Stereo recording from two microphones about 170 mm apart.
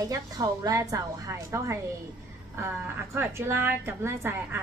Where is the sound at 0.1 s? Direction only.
20° right (ahead or behind).